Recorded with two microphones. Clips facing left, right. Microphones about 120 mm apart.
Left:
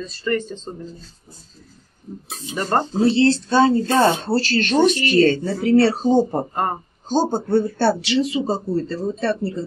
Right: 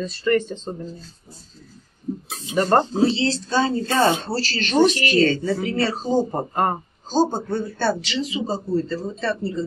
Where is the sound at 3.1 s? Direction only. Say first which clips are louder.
Left 6 dB; 55° left (ahead or behind).